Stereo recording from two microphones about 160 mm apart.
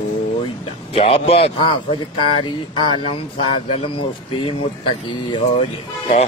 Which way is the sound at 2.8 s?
30° left (ahead or behind).